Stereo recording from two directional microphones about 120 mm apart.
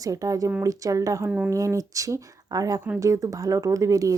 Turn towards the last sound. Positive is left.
turn(degrees=-30)  # may be behind; listen again after turning